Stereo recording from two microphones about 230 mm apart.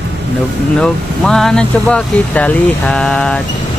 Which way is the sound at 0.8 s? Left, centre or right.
Centre.